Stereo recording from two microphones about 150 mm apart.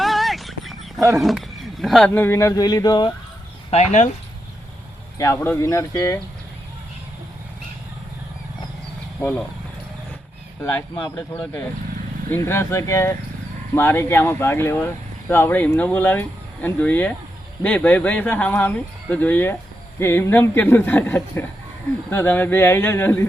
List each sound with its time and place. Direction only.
0.0 s a sound: centre (ahead or behind)
1.1 s speech: centre (ahead or behind); by 3.1 s 25° left (ahead or behind)
3.7 s speech: 50° left (ahead or behind)
5.1 s speech: 20° left (ahead or behind)
10.9 s speech: 25° left (ahead or behind)